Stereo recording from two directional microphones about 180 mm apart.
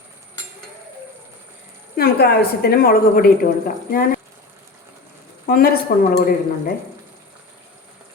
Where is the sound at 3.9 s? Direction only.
55° left (ahead or behind).